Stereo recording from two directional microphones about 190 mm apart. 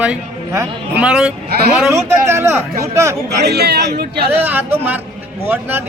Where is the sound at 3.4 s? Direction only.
60° right (ahead or behind).